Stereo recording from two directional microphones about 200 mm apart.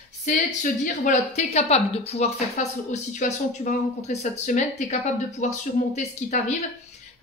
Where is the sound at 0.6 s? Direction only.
40° left (ahead or behind).